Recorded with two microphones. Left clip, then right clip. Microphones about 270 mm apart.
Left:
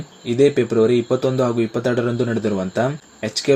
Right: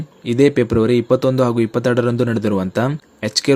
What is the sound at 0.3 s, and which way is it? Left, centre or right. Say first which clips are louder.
Speech: right 1 dB; right.